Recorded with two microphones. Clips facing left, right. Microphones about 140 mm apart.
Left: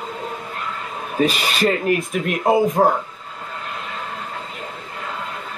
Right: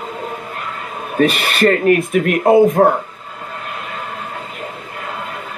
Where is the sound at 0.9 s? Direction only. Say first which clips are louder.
Right 5 dB; 5° right (ahead or behind).